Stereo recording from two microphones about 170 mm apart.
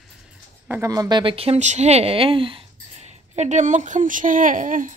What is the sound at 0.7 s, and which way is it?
Speech, 20° right (ahead or behind).